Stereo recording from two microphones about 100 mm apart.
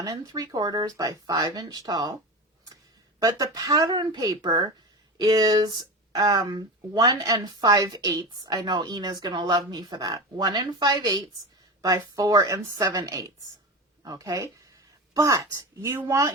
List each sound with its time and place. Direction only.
0.0 s speech: 35° right (ahead or behind)
3.2 s a woman's voice: 35° right (ahead or behind)